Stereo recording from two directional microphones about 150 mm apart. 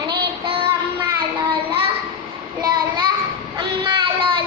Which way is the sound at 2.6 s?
25° right (ahead or behind).